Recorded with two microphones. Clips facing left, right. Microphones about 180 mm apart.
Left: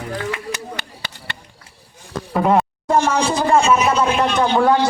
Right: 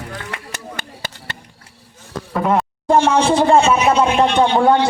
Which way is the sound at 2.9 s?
30° right (ahead or behind).